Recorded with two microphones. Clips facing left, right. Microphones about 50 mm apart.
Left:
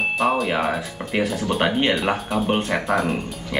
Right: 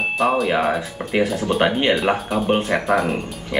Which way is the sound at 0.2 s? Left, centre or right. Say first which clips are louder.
Right 4 dB; centre.